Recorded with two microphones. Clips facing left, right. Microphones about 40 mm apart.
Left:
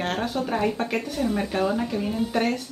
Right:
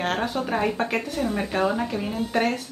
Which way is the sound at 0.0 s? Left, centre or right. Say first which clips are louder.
Right 1 dB; centre.